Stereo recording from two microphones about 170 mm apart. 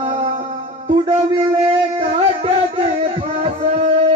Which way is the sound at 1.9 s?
35° right (ahead or behind).